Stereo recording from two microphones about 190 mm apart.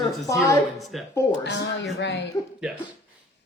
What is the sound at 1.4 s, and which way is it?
Speech, 65° left (ahead or behind).